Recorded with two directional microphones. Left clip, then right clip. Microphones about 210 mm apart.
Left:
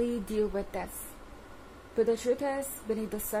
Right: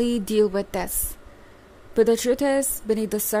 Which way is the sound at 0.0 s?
45° right (ahead or behind).